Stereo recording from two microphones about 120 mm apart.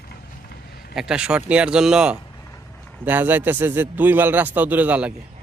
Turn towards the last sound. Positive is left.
turn(degrees=-10)  # may be behind; listen again after turning